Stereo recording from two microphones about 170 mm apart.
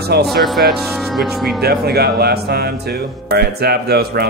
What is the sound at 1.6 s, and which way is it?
Speech, 70° right (ahead or behind).